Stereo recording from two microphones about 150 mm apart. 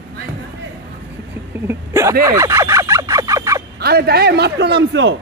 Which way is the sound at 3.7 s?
90° right.